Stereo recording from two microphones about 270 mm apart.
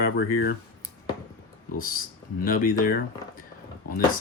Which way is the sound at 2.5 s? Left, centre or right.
Left.